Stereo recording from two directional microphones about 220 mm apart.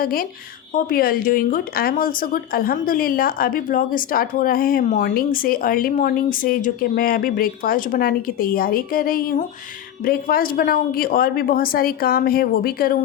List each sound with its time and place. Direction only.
0.0 s speech: 40° left (ahead or behind)